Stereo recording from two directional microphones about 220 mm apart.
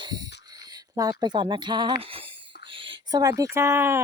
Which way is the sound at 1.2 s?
20° right (ahead or behind).